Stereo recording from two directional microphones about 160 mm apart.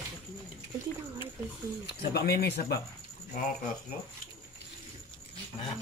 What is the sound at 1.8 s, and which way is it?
Speech, 90° left.